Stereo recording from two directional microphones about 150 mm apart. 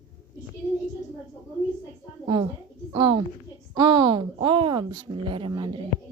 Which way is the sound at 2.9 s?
35° right (ahead or behind).